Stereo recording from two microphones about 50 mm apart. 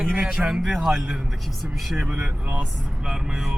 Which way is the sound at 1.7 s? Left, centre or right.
Centre.